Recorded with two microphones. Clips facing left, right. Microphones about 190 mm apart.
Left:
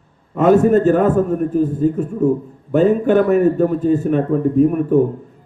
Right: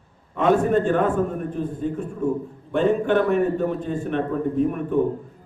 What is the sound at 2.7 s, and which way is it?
A man's voice, 5° left (ahead or behind).